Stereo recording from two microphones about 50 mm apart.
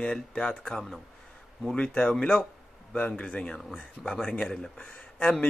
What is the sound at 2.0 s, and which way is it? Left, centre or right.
Speech, centre.